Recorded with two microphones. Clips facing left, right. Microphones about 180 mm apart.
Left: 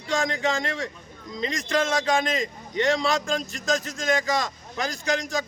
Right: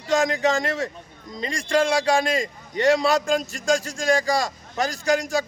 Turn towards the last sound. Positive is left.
turn(degrees=-35)  # may be behind; listen again after turning